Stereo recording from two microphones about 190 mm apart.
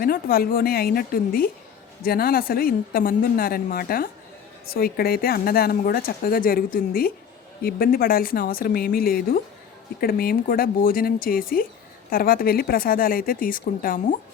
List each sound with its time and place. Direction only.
0.0 s speech: 50° left (ahead or behind)